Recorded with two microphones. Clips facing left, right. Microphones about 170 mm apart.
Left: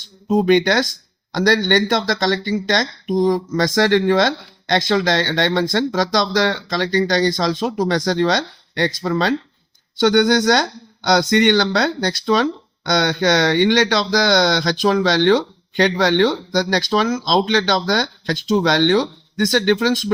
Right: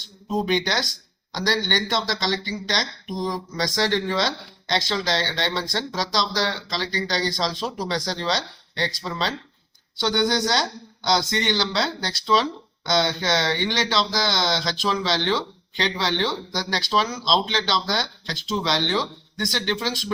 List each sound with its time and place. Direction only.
0.3 s speech: 55° left (ahead or behind)